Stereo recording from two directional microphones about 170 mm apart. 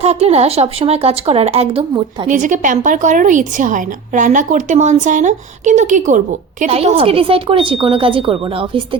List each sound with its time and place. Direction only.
0.0 s speech: 40° right (ahead or behind)
2.2 s a woman's voice: 50° right (ahead or behind)
6.7 s speech: 35° right (ahead or behind)